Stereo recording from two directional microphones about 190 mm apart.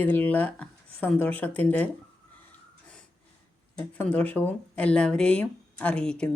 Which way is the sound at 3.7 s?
5° left (ahead or behind).